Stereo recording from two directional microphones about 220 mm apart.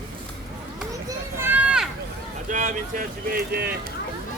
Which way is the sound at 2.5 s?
35° right (ahead or behind).